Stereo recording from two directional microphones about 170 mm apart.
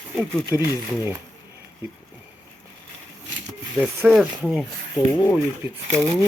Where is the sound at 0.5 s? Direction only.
15° right (ahead or behind).